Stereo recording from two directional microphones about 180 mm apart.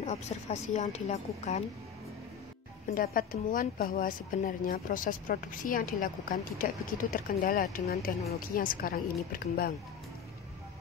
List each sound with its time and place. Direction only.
0.0 s a woman's voice: 40° left (ahead or behind)
2.9 s a woman's voice: 50° left (ahead or behind)